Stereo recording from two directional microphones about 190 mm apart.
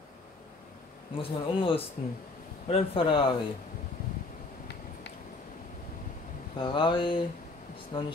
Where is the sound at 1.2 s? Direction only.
30° left (ahead or behind).